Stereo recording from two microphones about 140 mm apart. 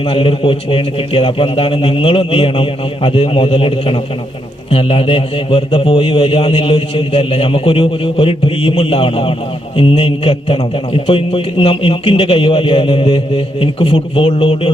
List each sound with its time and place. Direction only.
0.0 s a man's voice: 40° left (ahead or behind)